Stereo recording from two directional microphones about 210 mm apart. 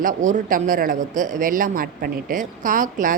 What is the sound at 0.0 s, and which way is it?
A woman's voice, 40° right (ahead or behind).